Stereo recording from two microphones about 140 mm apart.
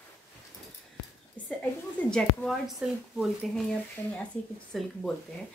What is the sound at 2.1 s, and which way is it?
A woman's voice, centre (ahead or behind).